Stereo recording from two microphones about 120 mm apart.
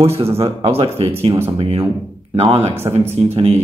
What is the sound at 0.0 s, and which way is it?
Speech, 55° right (ahead or behind).